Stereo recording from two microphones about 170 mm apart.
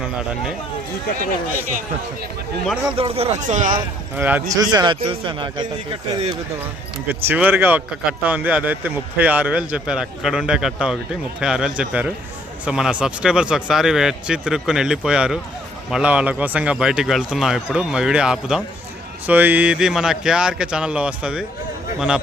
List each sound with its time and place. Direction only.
2.9 s speech: 35° right (ahead or behind); by 3.8 s 50° right (ahead or behind)
4.2 s speech: 10° right (ahead or behind)
4.5 s speech: 20° right (ahead or behind)
7.1 s a man's voice: 10° right (ahead or behind)